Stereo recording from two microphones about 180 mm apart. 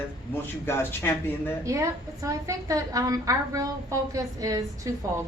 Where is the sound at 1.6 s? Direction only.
15° right (ahead or behind).